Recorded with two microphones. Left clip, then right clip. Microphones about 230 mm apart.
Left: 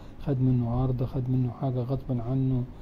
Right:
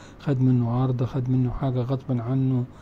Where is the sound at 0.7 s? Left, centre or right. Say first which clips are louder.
Right 4 dB; right.